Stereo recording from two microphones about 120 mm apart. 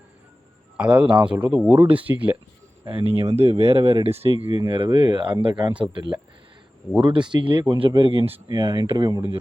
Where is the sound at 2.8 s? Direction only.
45° right (ahead or behind).